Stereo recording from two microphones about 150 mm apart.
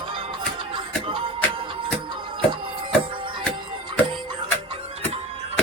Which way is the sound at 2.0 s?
35° right (ahead or behind).